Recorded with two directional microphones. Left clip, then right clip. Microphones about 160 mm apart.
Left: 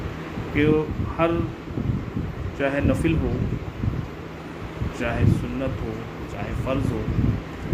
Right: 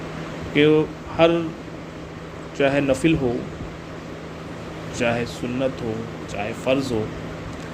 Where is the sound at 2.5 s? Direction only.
50° right (ahead or behind).